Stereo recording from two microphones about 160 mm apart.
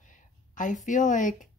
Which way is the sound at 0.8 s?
50° left (ahead or behind).